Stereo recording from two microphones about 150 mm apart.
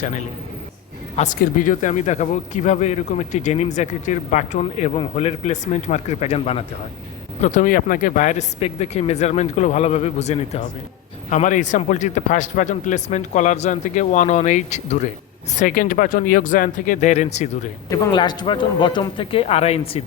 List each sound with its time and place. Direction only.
1.1 s speech: 50° left (ahead or behind)
1.4 s speech: 60° left (ahead or behind); by 6.7 s 45° left (ahead or behind)
7.4 s speech: 55° left (ahead or behind)
15.5 s speech: 70° left (ahead or behind); by 17.7 s 50° left (ahead or behind)
17.8 s a man's voice: 20° left (ahead or behind); by 20.0 s 40° left (ahead or behind)